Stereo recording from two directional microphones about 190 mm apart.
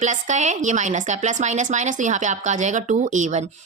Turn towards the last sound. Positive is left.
turn(degrees=-40)  # may be behind; listen again after turning